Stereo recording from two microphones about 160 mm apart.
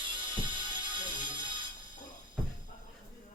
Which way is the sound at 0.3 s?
30° right (ahead or behind).